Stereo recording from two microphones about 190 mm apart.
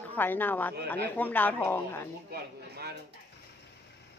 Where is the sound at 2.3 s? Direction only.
55° right (ahead or behind).